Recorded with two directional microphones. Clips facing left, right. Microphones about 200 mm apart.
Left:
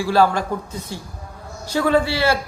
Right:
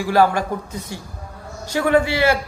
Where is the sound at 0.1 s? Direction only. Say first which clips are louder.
Right 1 dB; 15° right (ahead or behind).